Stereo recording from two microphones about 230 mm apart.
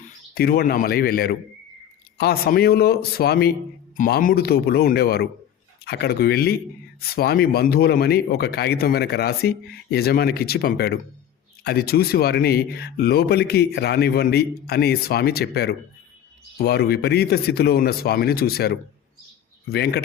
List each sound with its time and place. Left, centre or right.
0.0 s a man's voice: left